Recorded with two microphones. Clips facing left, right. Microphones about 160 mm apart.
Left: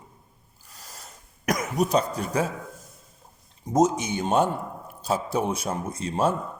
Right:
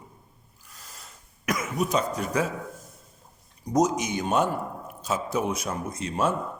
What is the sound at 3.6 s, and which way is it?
A man's voice, 25° left (ahead or behind).